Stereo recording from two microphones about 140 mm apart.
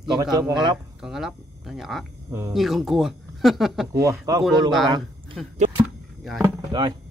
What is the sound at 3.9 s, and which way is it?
Speech, 20° right (ahead or behind).